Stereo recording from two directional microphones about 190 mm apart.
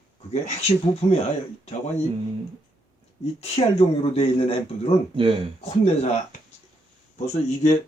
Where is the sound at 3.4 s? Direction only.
30° left (ahead or behind).